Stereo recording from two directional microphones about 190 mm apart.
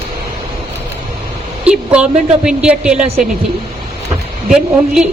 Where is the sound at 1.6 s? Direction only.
5° right (ahead or behind).